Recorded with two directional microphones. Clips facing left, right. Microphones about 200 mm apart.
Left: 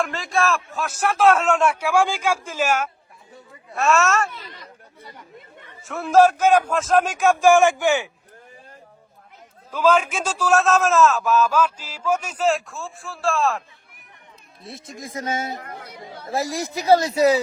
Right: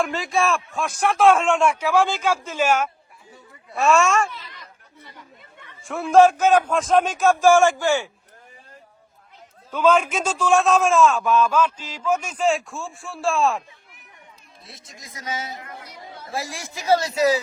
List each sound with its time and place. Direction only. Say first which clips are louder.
0.0 s a man's voice: even; centre (ahead or behind)
5.8 s a man's voice: right 1 dB; centre (ahead or behind); by 8.1 s 20° left (ahead or behind)
9.7 s a man's voice: even; 5° left (ahead or behind)
14.6 s speech: left 10 dB; 55° left (ahead or behind); by 17.2 s 35° left (ahead or behind)